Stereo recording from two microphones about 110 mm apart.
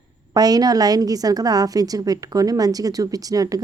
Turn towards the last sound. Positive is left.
turn(degrees=-35)  # may be behind; listen again after turning